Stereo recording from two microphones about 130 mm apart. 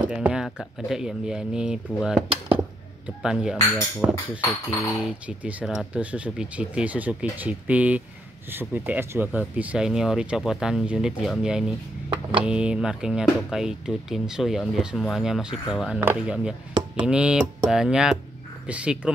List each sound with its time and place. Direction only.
0.1 s speech: 5° right (ahead or behind)
4.4 s a sound: 20° left (ahead or behind)
5.0 s speech: 10° right (ahead or behind)